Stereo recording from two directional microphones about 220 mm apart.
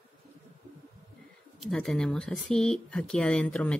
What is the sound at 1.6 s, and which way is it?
Speech, centre (ahead or behind).